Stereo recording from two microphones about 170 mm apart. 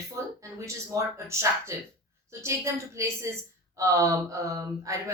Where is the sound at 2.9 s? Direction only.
15° right (ahead or behind).